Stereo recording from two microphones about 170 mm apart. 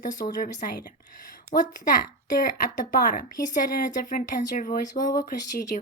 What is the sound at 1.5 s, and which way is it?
A woman's voice, 50° left (ahead or behind).